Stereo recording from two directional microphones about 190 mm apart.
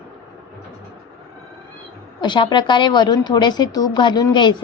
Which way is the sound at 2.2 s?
25° left (ahead or behind).